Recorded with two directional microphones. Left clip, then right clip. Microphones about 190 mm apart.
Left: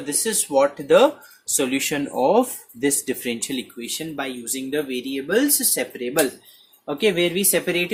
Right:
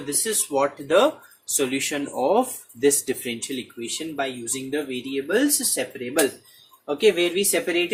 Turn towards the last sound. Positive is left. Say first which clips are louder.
# left 1 dB
turn(degrees=50)  # may be behind; listen again after turning